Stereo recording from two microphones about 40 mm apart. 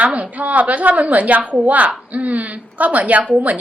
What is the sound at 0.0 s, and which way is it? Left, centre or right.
A woman's voice, right.